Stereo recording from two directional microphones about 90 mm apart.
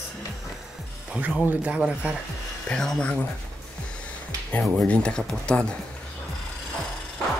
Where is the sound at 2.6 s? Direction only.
5° left (ahead or behind).